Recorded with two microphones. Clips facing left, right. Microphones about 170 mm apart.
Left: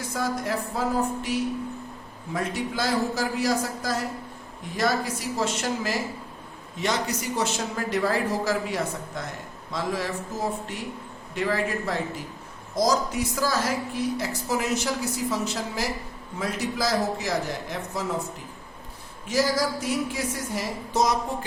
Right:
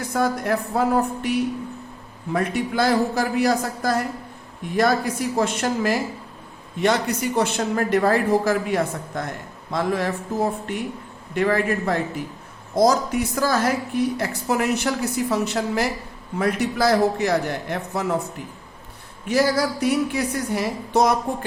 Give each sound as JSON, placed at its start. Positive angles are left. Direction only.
{"t": 0.0, "sound": "a woman's voice", "side_deg": -60}
{"t": 19.3, "sound": "a woman's voice", "side_deg": -60}